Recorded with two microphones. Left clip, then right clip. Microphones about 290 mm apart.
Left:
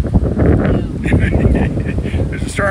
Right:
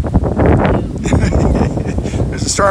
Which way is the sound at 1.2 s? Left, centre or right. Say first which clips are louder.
Right 1 dB; centre.